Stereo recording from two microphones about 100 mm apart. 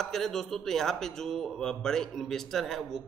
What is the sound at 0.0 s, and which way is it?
Speech, 5° left (ahead or behind).